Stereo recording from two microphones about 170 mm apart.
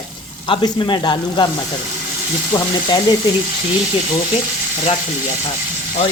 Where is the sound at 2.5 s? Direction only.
20° left (ahead or behind).